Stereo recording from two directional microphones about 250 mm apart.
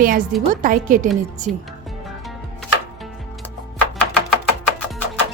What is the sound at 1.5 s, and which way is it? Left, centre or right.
Speech, centre.